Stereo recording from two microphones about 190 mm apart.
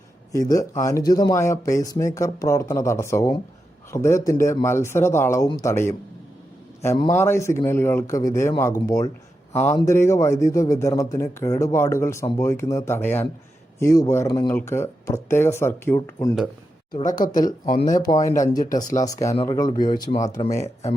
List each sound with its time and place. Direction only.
0.3 s speech: 15° left (ahead or behind)
9.5 s speech: 35° left (ahead or behind)
9.7 s speech: 15° left (ahead or behind)
16.9 s speech: 45° left (ahead or behind)
18.0 s speech: 20° left (ahead or behind)